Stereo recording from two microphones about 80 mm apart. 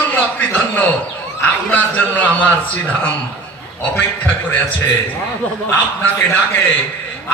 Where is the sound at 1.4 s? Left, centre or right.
Centre.